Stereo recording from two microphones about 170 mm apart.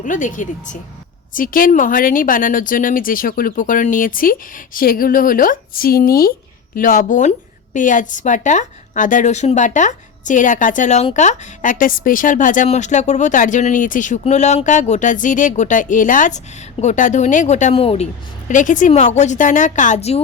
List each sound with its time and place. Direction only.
0.0 s a woman's voice: 50° left (ahead or behind)